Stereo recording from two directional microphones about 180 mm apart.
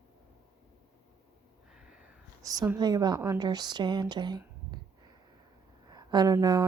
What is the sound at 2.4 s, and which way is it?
A woman's voice, 20° right (ahead or behind).